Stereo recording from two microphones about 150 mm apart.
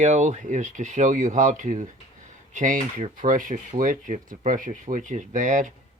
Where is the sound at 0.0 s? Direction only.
50° right (ahead or behind).